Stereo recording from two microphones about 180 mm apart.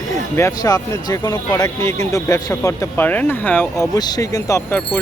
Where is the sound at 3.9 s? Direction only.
20° left (ahead or behind).